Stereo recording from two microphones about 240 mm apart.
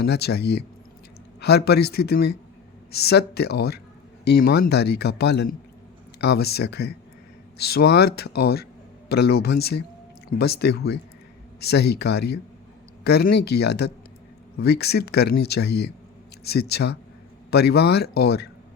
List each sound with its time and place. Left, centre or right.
0.0 s speech: left